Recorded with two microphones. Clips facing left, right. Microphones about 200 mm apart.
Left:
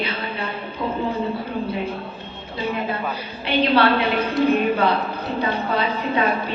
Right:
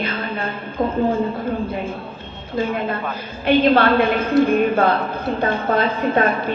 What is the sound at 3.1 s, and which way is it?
A woman's voice, 50° right (ahead or behind).